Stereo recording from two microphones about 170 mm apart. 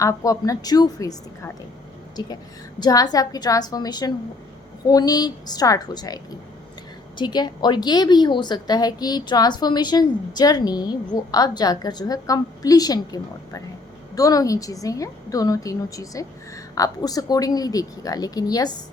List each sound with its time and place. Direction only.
0.0 s a woman's voice: 20° left (ahead or behind)
2.8 s a woman's voice: 20° left (ahead or behind)
7.2 s a woman's voice: 25° left (ahead or behind)